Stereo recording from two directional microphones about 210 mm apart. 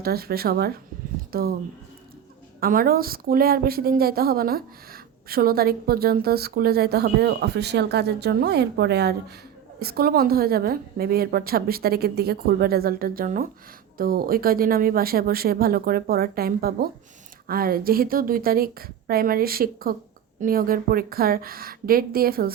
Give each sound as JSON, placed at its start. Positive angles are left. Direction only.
{"t": 0.0, "sound": "a woman's voice", "side_deg": -45}
{"t": 2.6, "sound": "a woman's voice", "side_deg": -45}